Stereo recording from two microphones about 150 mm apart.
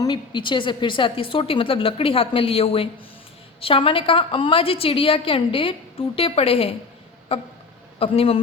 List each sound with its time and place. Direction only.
0.0 s a woman's voice: 30° left (ahead or behind)